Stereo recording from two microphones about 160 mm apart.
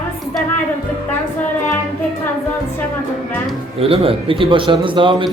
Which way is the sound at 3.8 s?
35° right (ahead or behind).